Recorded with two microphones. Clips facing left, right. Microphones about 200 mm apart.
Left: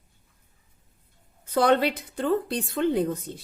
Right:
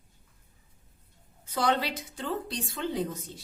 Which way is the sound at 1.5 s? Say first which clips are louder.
Left 7 dB; 55° left (ahead or behind).